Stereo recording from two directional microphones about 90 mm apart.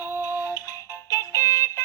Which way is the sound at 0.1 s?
20° right (ahead or behind).